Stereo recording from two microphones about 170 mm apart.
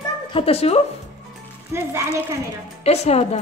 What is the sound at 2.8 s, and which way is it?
Speech, 35° left (ahead or behind).